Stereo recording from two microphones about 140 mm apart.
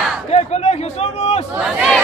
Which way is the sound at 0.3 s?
50° left (ahead or behind).